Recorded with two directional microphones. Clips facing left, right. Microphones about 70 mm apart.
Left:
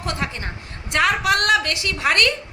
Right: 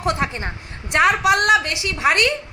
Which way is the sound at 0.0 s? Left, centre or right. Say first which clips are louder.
Right 5 dB; right.